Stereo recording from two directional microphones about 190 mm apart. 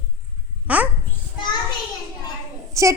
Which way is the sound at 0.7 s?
5° right (ahead or behind).